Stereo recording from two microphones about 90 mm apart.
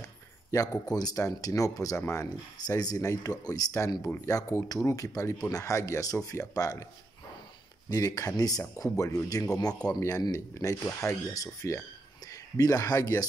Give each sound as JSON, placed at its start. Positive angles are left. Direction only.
{"t": 0.5, "sound": "speech", "side_deg": 40}
{"t": 7.9, "sound": "speech", "side_deg": 40}